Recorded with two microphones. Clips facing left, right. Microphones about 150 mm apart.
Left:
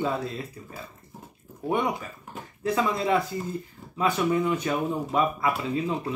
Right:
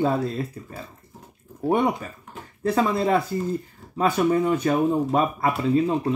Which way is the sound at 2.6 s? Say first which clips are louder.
Right 4 dB; 40° right (ahead or behind).